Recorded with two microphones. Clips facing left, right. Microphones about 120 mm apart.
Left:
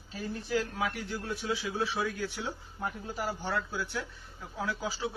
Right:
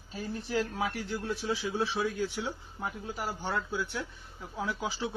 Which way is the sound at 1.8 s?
25° right (ahead or behind).